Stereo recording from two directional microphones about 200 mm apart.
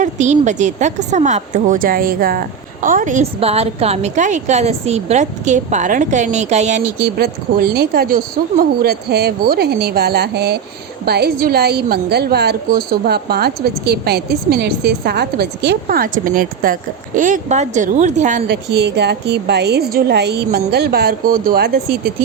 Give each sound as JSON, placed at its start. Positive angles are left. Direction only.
{"t": 0.0, "sound": "a woman's voice", "side_deg": -35}
{"t": 7.0, "sound": "a woman's voice", "side_deg": -50}
{"t": 18.4, "sound": "a woman's voice", "side_deg": -55}